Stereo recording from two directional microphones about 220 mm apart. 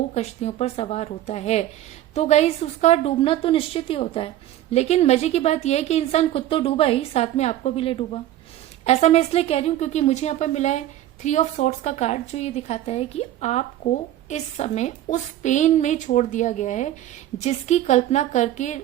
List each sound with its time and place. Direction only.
0.1 s speech: 30° left (ahead or behind)